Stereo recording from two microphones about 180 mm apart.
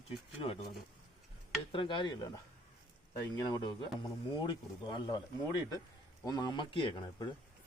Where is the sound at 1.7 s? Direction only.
25° left (ahead or behind).